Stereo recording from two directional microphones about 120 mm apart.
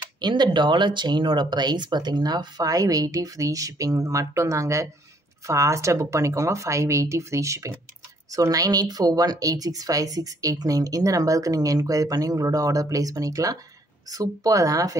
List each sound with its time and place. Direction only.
0.2 s speech: 40° right (ahead or behind)